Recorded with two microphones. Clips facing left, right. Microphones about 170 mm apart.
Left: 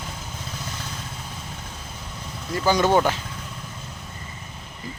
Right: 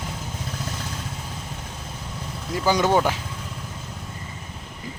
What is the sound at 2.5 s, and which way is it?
Speech, 10° right (ahead or behind).